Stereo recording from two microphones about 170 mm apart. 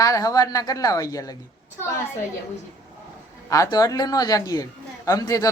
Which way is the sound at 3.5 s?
20° left (ahead or behind).